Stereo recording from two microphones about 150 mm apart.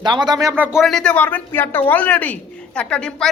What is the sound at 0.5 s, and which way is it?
Speech, 10° right (ahead or behind).